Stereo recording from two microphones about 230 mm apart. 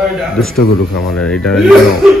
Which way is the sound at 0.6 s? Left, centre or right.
Left.